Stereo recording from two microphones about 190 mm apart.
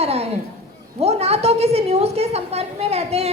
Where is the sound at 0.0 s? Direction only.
30° right (ahead or behind).